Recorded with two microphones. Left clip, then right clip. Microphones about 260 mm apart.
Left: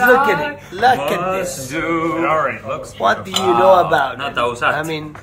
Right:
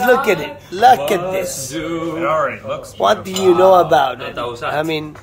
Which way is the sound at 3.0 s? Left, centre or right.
Right.